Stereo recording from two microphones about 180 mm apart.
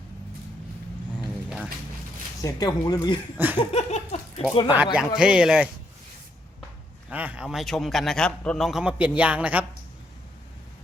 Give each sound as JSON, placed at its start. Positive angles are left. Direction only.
{"t": 1.5, "sound": "a sound", "side_deg": -5}
{"t": 2.4, "sound": "speech", "side_deg": 20}
{"t": 3.3, "sound": "laughter", "side_deg": -10}
{"t": 3.6, "sound": "a sound", "side_deg": 35}
{"t": 4.9, "sound": "a man's voice", "side_deg": -5}
{"t": 7.1, "sound": "a man's voice", "side_deg": -10}